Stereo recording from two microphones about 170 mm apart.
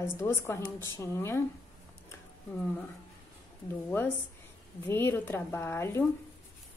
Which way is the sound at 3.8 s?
10° left (ahead or behind).